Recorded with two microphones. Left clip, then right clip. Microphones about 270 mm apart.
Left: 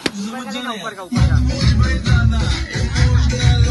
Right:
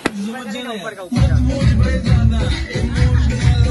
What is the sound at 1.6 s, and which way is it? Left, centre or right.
Music, centre.